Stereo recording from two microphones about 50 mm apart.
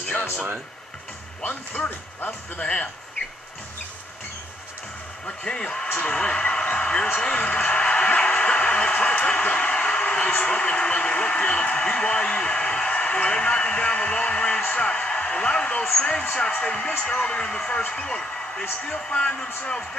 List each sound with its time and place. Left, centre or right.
1.4 s speech: left
2.6 s speech: centre
5.2 s a man's voice: centre